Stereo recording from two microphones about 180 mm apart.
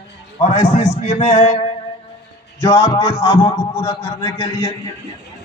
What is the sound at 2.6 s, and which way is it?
A man's voice, 25° left (ahead or behind).